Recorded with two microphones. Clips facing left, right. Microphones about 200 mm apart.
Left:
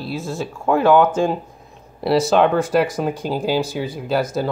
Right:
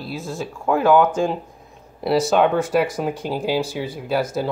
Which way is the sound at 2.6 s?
5° right (ahead or behind).